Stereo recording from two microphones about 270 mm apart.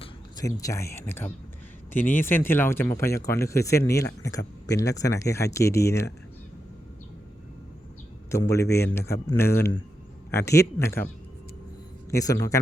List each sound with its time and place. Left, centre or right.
0.0 s speech: centre
8.3 s speech: centre
8.6 s a man's voice: left
8.9 s speech: centre
12.1 s speech: centre